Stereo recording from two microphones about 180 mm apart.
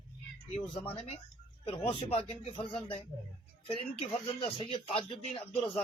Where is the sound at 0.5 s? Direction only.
30° left (ahead or behind).